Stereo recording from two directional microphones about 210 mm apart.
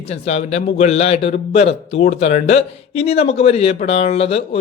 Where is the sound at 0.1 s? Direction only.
30° left (ahead or behind).